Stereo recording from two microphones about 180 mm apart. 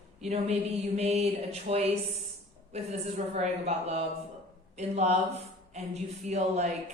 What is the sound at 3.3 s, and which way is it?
Mantra, 35° right (ahead or behind).